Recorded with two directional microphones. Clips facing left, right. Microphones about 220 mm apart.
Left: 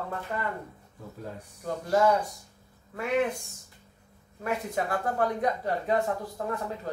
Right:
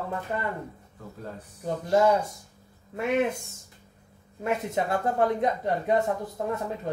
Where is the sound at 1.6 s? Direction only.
20° right (ahead or behind).